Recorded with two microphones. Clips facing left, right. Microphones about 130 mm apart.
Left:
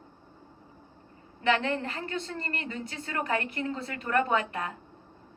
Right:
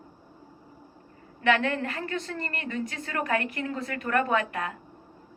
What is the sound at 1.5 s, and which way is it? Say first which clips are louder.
A woman's voice: right 2 dB; 25° left (ahead or behind).